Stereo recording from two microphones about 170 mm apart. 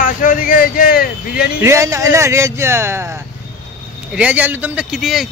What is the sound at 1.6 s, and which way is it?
Speech, 15° right (ahead or behind).